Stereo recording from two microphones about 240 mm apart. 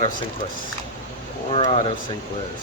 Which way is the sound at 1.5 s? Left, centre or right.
Left.